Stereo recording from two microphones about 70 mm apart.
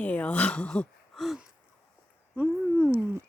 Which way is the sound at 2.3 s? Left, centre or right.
Centre.